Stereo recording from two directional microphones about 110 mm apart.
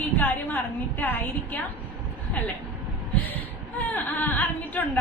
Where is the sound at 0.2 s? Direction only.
15° left (ahead or behind).